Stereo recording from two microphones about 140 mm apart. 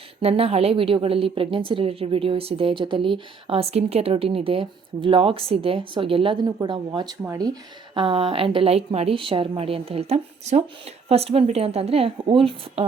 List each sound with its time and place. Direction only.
0.2 s a woman's voice: 45° right (ahead or behind)